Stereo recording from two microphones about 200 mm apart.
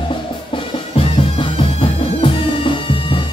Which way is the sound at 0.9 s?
30° left (ahead or behind).